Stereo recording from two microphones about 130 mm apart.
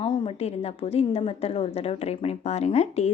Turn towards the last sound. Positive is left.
turn(degrees=55)  # may be behind; listen again after turning